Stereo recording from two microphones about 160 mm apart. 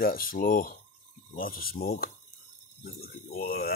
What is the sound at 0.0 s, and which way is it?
Speech, 65° left (ahead or behind).